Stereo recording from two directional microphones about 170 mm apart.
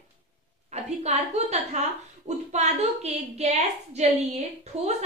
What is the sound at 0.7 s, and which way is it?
A woman's voice, 40° right (ahead or behind).